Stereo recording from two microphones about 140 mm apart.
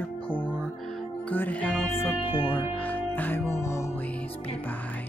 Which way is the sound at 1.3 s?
10° left (ahead or behind).